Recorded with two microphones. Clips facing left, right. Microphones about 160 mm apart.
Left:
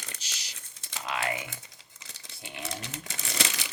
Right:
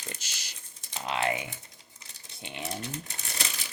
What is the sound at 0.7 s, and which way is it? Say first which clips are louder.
Crumpling: right 1 dB; 90° left.